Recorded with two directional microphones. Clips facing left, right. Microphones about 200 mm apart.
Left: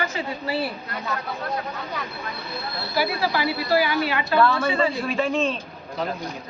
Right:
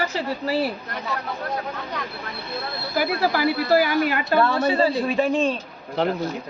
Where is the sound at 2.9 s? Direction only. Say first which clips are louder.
Right 2 dB; 50° right (ahead or behind).